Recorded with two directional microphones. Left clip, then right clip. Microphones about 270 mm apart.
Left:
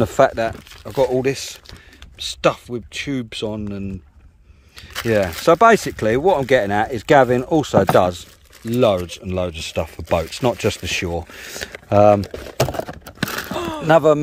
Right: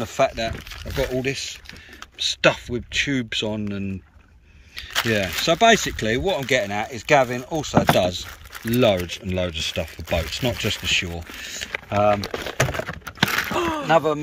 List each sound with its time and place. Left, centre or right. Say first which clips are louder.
0.0 s speech: left 6 dB; left
0.4 s speech: left 5 dB; centre
2.1 s speech: even; centre; by 7.8 s left
8.6 s speech: left 2 dB; centre
11.9 s speech: left 7 dB; left
12.5 s a sound: left 4 dB; left
13.8 s speech: left 7 dB; left